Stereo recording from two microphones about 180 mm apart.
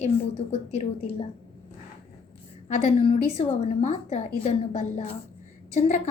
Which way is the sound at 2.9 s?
35° left (ahead or behind).